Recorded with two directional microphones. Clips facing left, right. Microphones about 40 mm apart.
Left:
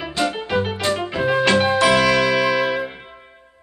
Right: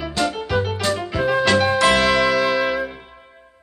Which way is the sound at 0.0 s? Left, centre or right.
Left.